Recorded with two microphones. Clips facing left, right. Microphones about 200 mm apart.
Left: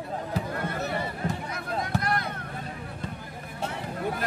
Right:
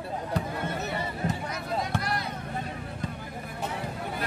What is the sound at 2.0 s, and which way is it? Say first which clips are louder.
Vehicle: left 3 dB; 55° left (ahead or behind).